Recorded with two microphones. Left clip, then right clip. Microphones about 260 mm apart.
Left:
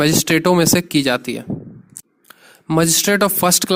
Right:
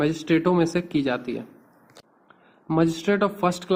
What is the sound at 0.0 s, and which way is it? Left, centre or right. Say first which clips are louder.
Speech: left 7 dB; left.